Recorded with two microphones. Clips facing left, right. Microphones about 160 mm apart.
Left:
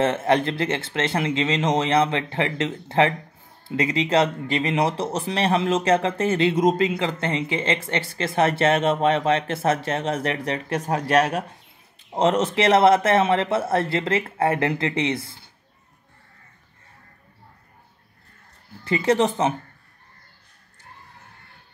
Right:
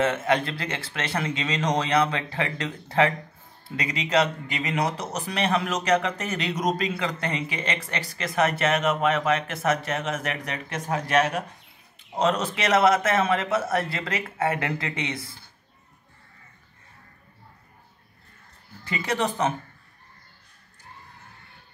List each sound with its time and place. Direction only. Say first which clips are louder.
0.0 s speech: left 3 dB; 30° left (ahead or behind)
18.9 s speech: left 7 dB; 25° left (ahead or behind)